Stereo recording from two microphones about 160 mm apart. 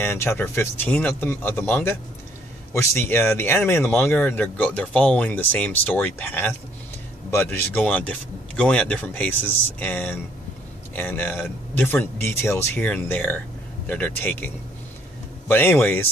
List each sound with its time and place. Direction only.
0.0 s speech: 15° left (ahead or behind)